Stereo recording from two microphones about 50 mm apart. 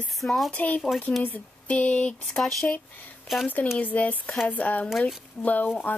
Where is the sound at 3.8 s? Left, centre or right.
Left.